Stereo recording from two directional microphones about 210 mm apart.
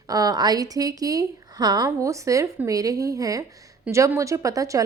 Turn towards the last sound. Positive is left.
turn(degrees=-15)  # may be behind; listen again after turning